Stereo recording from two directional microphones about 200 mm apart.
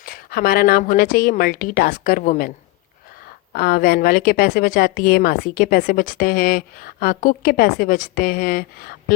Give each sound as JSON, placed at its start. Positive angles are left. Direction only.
{"t": 0.0, "sound": "a woman's voice", "side_deg": 50}
{"t": 3.5, "sound": "a woman's voice", "side_deg": 45}